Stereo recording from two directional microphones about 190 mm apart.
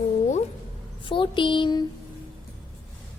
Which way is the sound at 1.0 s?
25° left (ahead or behind).